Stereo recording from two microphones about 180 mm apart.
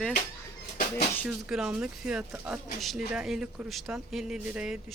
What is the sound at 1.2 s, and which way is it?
Speech, 5° right (ahead or behind).